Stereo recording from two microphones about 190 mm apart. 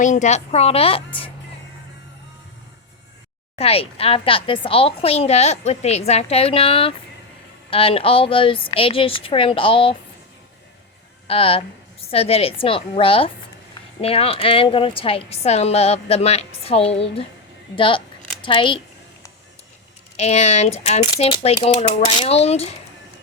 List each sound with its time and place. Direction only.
0.0 s a woman's voice: 40° left (ahead or behind)
3.5 s a woman's voice: 30° left (ahead or behind)
11.3 s a woman's voice: 30° left (ahead or behind)
20.1 s a woman's voice: 35° left (ahead or behind)